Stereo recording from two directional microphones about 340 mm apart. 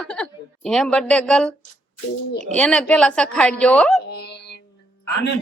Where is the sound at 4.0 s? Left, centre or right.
Left.